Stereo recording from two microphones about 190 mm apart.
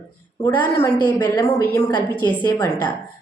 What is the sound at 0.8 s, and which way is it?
A woman's voice, 15° left (ahead or behind).